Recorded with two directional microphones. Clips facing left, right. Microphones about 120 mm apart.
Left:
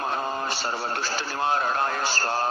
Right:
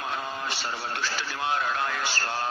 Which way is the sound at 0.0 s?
40° left (ahead or behind).